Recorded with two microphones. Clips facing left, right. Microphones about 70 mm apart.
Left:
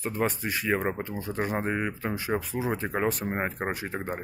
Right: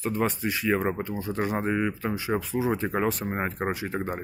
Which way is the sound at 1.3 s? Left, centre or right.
Left.